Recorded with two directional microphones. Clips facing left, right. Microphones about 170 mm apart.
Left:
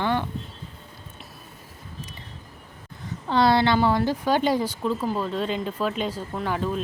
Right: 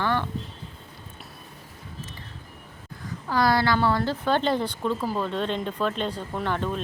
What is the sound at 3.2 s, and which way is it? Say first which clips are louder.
Speech: left 3 dB; 25° left (ahead or behind).